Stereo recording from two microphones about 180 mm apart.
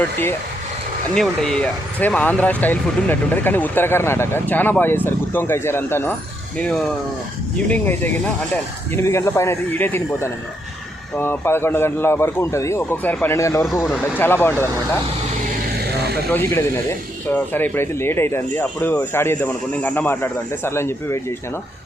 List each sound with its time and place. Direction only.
1.1 s speech: 5° left (ahead or behind)
15.8 s vehicle: 65° right (ahead or behind)
16.3 s speech: 10° left (ahead or behind)